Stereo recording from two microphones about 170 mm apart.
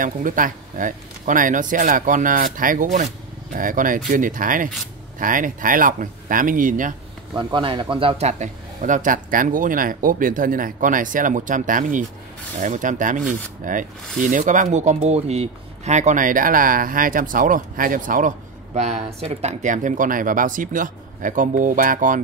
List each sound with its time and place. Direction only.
0.0 s a man's voice: 50° right (ahead or behind)
7.3 s a man's voice: 30° right (ahead or behind); by 22.2 s 50° right (ahead or behind)